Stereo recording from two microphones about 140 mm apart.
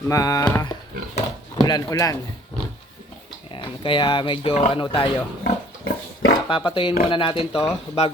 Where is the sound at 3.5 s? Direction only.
35° left (ahead or behind).